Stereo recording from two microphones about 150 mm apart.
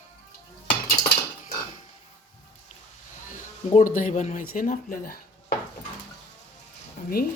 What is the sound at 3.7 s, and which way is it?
Speech, 55° left (ahead or behind).